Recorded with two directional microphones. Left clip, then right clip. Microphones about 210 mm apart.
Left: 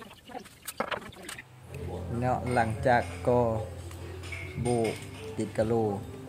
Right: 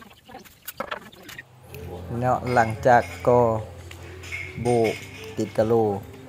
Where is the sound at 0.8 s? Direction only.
Centre (ahead or behind).